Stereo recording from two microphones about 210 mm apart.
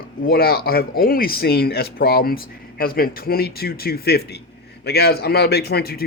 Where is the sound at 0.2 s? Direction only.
45° left (ahead or behind).